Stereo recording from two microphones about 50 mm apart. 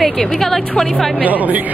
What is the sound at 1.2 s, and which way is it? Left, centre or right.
Speech, right.